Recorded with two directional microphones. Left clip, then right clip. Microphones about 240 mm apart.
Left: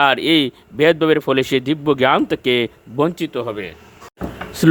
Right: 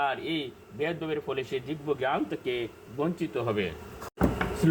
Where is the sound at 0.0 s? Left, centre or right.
Left.